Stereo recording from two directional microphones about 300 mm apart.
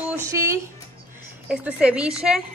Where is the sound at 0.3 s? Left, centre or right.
Centre.